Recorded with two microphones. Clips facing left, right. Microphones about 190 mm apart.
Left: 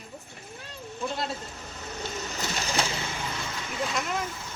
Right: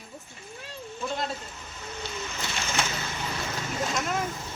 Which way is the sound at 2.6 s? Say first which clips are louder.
Left 1 dB; 35° left (ahead or behind).